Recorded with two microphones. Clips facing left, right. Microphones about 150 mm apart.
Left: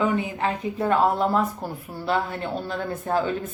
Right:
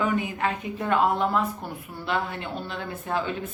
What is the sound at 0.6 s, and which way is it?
Speech, 35° left (ahead or behind).